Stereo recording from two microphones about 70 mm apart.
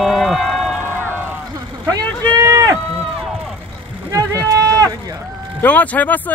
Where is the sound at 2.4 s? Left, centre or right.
Right.